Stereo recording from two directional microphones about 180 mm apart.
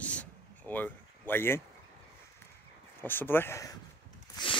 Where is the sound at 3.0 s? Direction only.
10° left (ahead or behind).